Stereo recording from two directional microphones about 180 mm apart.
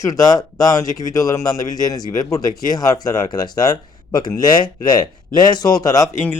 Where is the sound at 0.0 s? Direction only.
20° left (ahead or behind).